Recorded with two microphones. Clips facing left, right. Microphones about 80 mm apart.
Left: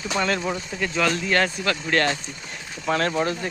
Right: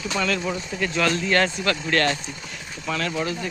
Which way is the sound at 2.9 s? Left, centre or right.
Left.